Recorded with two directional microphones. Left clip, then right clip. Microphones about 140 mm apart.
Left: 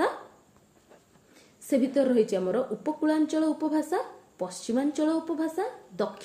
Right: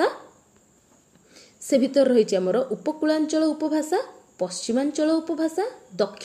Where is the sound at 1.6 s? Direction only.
20° right (ahead or behind).